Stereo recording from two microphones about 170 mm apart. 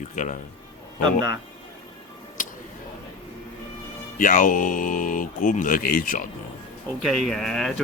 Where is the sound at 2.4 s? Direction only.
50° left (ahead or behind).